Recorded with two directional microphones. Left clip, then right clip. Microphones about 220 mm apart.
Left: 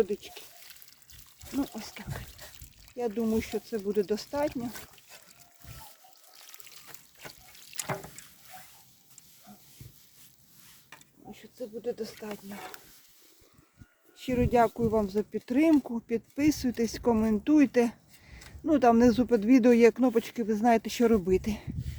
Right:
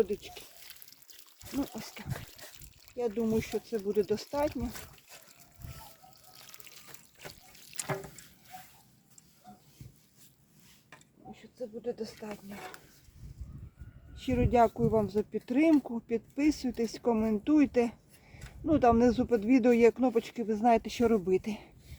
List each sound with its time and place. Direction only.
0.2 s speech: 20° left (ahead or behind)
1.4 s speech: centre (ahead or behind)
1.8 s speech: 20° left (ahead or behind)
2.2 s a sound: centre (ahead or behind)
3.2 s speech: 20° left (ahead or behind)
4.4 s speech: centre (ahead or behind)
6.3 s splash: 5° left (ahead or behind)
7.8 s a sound: 40° left (ahead or behind)
10.8 s a sound: 45° left (ahead or behind)
14.2 s speech: 15° left (ahead or behind)